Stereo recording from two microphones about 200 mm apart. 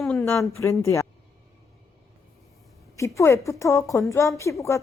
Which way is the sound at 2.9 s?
15° left (ahead or behind).